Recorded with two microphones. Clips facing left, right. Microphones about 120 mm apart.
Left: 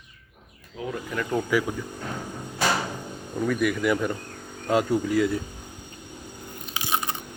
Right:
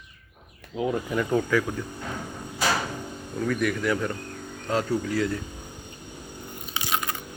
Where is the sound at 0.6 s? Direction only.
70° right (ahead or behind).